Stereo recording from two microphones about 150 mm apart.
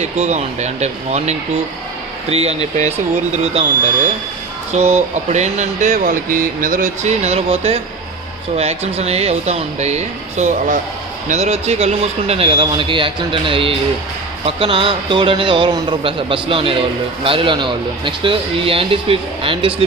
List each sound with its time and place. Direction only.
0.0 s a man's voice: 45° right (ahead or behind)